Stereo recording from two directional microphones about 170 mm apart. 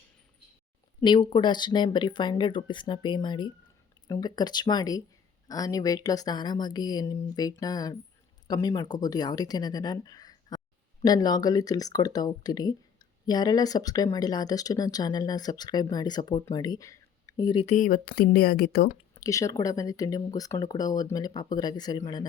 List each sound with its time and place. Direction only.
1.0 s speech: 30° left (ahead or behind)
17.7 s speech: 50° left (ahead or behind); by 18.9 s 65° left (ahead or behind)
19.1 s speech: 20° left (ahead or behind)